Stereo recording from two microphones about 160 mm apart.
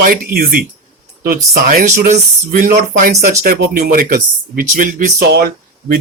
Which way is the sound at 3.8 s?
55° right (ahead or behind).